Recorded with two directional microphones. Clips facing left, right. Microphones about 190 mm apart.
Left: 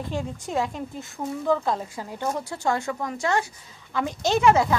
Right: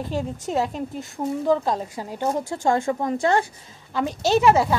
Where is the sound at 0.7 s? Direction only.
20° right (ahead or behind).